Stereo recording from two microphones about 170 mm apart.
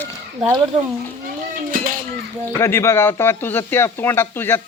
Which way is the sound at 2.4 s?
15° left (ahead or behind).